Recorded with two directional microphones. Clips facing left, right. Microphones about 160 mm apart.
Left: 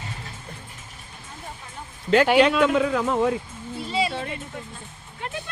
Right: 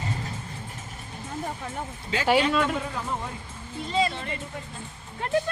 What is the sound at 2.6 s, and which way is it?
Speech, 90° left.